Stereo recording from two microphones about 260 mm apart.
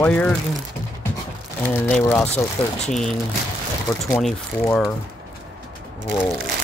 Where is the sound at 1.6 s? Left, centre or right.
Centre.